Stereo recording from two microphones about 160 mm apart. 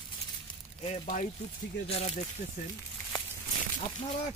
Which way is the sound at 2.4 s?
55° left (ahead or behind).